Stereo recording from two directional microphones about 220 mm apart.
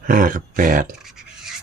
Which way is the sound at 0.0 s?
40° right (ahead or behind).